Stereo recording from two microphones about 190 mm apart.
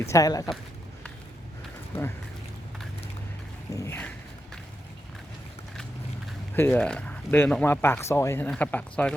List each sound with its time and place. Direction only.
0.0 s a man's voice: 15° left (ahead or behind)
3.8 s a sound: 10° left (ahead or behind)
6.5 s a man's voice: 10° left (ahead or behind)